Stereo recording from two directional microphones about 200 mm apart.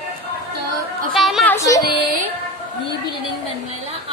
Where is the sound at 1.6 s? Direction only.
15° left (ahead or behind).